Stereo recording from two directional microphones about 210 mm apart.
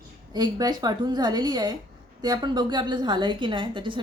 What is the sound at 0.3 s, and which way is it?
A woman's voice, 20° right (ahead or behind).